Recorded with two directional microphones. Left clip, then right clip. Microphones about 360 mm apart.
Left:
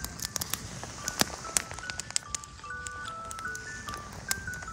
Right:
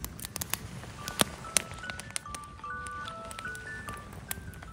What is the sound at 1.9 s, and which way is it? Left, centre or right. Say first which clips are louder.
Music: left 3 dB; right.